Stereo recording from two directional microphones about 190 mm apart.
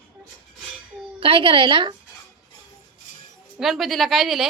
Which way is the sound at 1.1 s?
30° right (ahead or behind).